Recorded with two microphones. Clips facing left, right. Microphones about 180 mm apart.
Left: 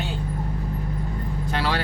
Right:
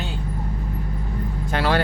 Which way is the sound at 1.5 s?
50° right (ahead or behind).